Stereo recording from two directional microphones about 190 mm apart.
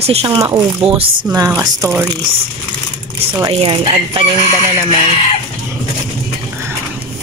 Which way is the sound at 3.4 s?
30° right (ahead or behind).